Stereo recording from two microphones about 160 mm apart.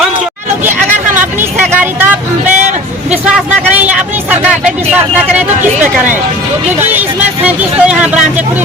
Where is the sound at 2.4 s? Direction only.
45° right (ahead or behind).